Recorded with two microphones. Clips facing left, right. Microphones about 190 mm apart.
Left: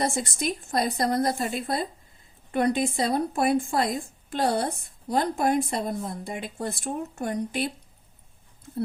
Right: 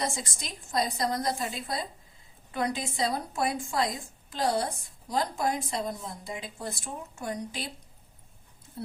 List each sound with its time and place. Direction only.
0.0 s a woman's voice: 55° left (ahead or behind)